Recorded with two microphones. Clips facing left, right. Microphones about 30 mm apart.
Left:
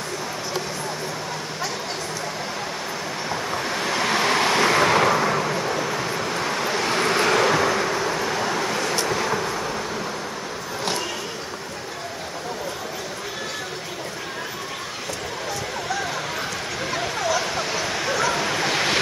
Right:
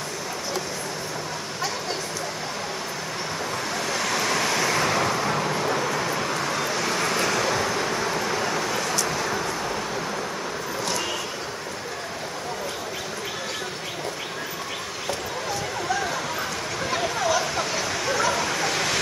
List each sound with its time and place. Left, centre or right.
3.7 s vehicle: left
5.4 s vehicle: centre
6.4 s vehicle: centre
7.8 s vehicle: centre
16.9 s bow-wow: centre; by 18.9 s left